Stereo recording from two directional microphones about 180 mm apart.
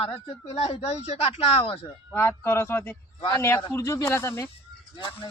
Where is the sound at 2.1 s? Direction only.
15° left (ahead or behind).